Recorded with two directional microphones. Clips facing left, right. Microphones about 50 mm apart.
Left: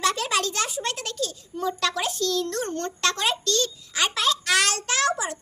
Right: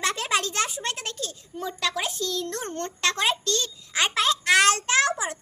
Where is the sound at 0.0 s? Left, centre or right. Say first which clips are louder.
Left 2 dB; right.